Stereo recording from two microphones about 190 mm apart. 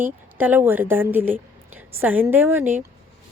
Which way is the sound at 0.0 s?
10° right (ahead or behind).